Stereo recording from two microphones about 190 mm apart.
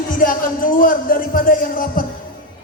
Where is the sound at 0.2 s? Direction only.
45° left (ahead or behind).